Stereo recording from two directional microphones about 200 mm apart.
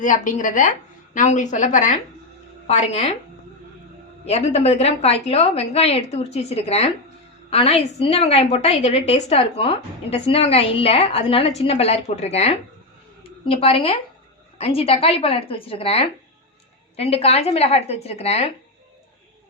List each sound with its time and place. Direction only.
0.0 s a woman's voice: 40° left (ahead or behind)
4.3 s a woman's voice: 35° left (ahead or behind)